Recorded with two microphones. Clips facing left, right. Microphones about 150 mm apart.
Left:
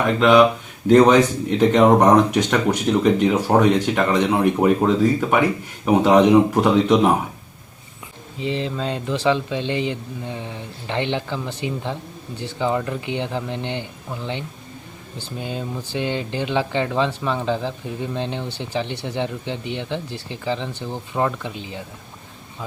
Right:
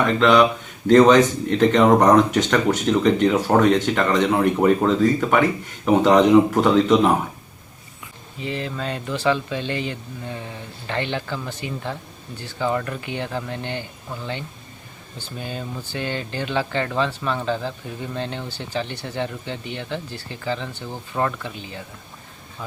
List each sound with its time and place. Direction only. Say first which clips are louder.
0.2 s speech: left 3 dB; 10° left (ahead or behind)
8.4 s speech: left 3 dB; 20° left (ahead or behind)